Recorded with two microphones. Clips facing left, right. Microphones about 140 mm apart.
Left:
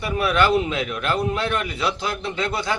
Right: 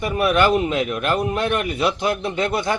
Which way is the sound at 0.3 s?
45° right (ahead or behind).